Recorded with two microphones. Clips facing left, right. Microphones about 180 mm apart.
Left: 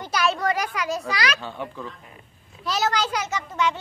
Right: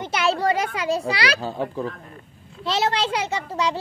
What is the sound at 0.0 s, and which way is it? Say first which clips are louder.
A child's voice: right 2 dB; 25° right (ahead or behind).